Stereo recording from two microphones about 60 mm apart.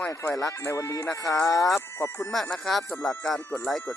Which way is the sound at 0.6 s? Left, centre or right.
Left.